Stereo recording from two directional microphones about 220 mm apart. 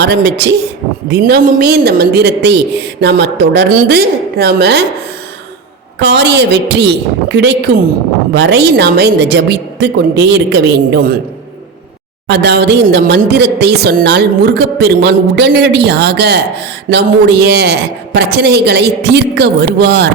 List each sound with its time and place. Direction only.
0.0 s speech: 50° right (ahead or behind)
6.0 s speech: 50° right (ahead or behind)
12.3 s speech: 50° right (ahead or behind)